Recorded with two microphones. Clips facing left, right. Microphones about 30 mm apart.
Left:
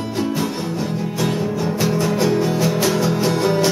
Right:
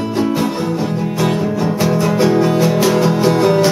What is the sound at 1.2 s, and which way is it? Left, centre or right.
Music, centre.